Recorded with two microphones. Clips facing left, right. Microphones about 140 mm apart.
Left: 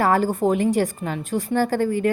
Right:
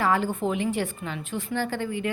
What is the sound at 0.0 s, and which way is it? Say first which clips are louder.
A woman's voice: left 5 dB; 40° left (ahead or behind).